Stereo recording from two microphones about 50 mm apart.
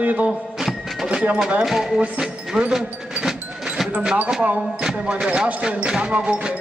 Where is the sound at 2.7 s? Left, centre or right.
Centre.